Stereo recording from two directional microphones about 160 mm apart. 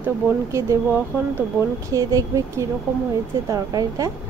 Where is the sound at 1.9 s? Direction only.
20° right (ahead or behind).